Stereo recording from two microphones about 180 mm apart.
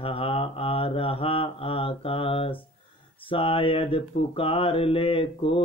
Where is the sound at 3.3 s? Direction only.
30° left (ahead or behind).